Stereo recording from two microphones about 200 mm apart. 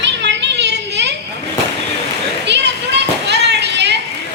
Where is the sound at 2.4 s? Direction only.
60° right (ahead or behind).